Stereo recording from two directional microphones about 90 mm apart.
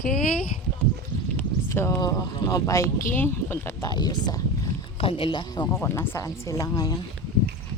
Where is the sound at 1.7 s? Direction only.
30° left (ahead or behind).